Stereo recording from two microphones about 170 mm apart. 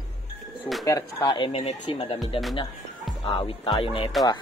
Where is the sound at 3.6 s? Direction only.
30° left (ahead or behind).